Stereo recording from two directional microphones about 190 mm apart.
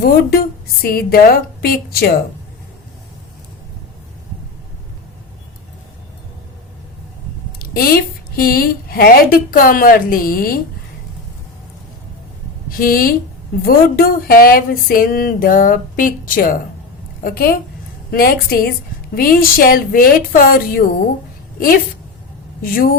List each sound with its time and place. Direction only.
0.0 s a woman's voice: 50° left (ahead or behind)
7.6 s a woman's voice: 50° left (ahead or behind)
12.7 s a woman's voice: 50° left (ahead or behind)
22.6 s a woman's voice: 50° left (ahead or behind)